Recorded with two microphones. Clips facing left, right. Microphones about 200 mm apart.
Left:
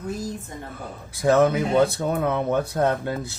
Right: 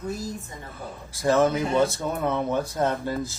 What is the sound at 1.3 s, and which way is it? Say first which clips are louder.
Speech: left 3 dB; 60° left (ahead or behind).